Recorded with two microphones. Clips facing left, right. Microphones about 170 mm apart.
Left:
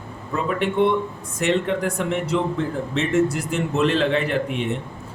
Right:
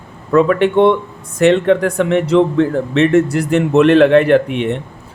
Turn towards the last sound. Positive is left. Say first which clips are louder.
# right 10 dB
turn(degrees=-70)  # may be behind; listen again after turning